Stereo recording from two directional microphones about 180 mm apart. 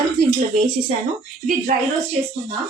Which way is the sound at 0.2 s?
55° right (ahead or behind).